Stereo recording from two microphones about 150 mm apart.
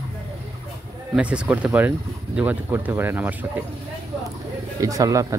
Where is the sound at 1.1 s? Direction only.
5° right (ahead or behind).